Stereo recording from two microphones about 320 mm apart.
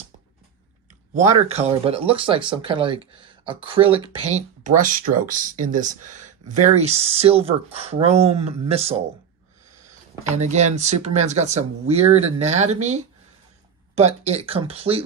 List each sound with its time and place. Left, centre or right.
1.1 s speech: right
10.4 s speech: right